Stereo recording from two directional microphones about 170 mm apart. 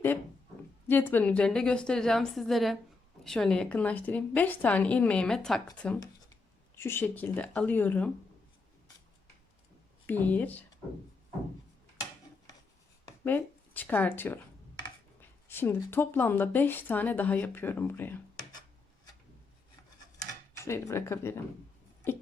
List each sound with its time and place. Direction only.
0.9 s a woman's voice: 10° left (ahead or behind)
10.1 s a woman's voice: 10° left (ahead or behind)
13.2 s a woman's voice: 10° left (ahead or behind)
20.7 s a woman's voice: 15° left (ahead or behind)